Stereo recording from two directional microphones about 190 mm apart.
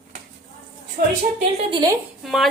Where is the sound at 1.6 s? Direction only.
25° right (ahead or behind).